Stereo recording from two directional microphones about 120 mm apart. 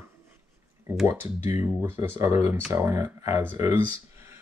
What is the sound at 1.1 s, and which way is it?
Speech, 20° right (ahead or behind).